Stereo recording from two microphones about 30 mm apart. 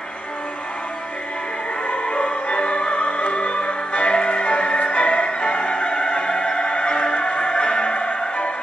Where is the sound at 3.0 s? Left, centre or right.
Left.